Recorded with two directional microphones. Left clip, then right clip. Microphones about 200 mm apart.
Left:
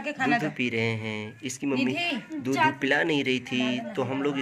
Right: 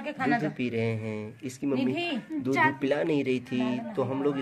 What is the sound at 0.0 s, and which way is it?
Speech, centre (ahead or behind).